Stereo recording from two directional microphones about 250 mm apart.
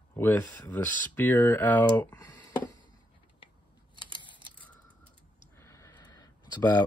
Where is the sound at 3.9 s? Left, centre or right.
Centre.